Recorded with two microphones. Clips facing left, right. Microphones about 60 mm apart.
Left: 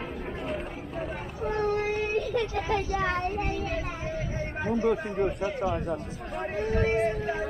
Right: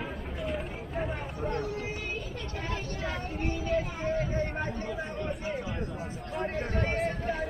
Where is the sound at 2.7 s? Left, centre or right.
Left.